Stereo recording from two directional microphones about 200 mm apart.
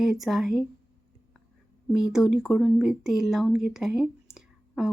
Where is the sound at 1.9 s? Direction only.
Centre (ahead or behind).